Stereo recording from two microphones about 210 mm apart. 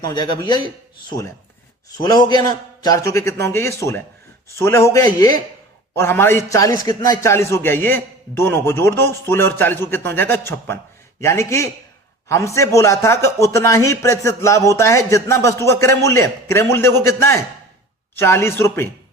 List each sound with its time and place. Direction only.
0.0 s a man's voice: 20° left (ahead or behind)
2.0 s a man's voice: 20° left (ahead or behind)